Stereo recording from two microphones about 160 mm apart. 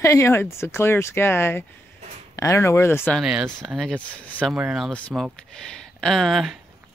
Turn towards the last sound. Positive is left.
turn(degrees=0)  # may be behind; listen again after turning